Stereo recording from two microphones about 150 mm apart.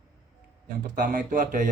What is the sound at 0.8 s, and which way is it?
Speech, 60° right (ahead or behind).